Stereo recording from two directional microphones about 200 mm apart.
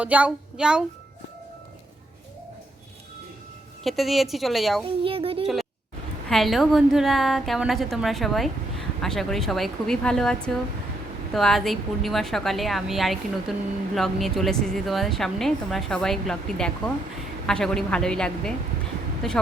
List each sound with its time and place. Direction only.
0.0 s a woman's voice: 5° right (ahead or behind)
3.8 s a woman's voice: centre (ahead or behind)
5.0 s speech: 25° right (ahead or behind)
6.2 s a woman's voice: centre (ahead or behind)